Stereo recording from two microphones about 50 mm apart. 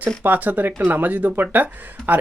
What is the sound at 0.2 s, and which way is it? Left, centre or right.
Speech, right.